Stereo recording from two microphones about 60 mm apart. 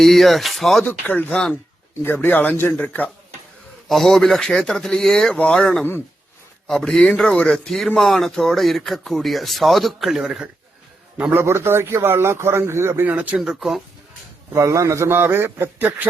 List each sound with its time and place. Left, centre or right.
0.0 s speech: centre
0.9 s speech: left
1.3 s speech: centre
2.0 s speech: left
2.7 s speech: left
3.8 s speech: centre
11.4 s a man's voice: right
13.3 s speech: centre
14.5 s a man's voice: right